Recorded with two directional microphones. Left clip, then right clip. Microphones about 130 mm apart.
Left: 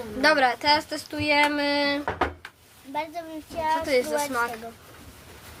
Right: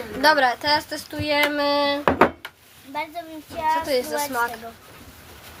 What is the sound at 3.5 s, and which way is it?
Speech, 20° left (ahead or behind).